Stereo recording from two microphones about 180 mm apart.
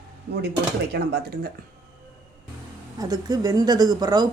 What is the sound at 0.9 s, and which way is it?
Speech, 65° right (ahead or behind).